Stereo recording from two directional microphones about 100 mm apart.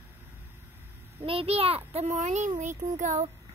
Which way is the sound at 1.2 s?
80° right.